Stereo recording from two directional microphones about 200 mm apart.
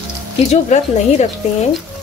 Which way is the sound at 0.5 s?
35° left (ahead or behind).